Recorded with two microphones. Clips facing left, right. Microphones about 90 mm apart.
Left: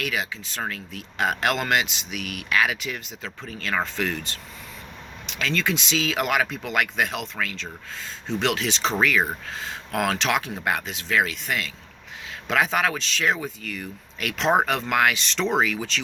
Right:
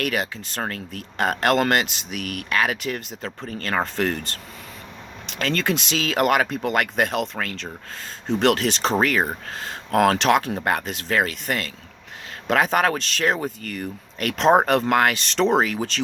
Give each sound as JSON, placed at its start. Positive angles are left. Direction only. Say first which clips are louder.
{"t": 0.0, "sound": "speech", "louder": "right 4 dB", "side_deg": -50}